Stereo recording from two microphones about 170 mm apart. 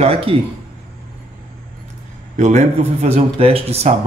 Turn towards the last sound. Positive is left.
turn(degrees=-35)  # may be behind; listen again after turning